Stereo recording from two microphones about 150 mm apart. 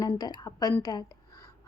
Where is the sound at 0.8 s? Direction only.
25° left (ahead or behind).